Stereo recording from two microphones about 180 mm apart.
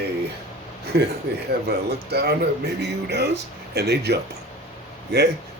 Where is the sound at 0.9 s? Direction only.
65° right (ahead or behind).